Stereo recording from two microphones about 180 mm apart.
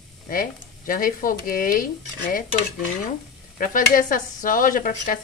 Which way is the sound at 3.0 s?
50° left (ahead or behind).